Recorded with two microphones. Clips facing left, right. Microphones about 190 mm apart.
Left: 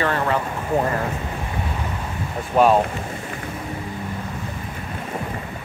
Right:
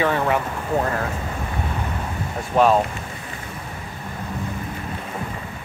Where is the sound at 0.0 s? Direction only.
15° right (ahead or behind).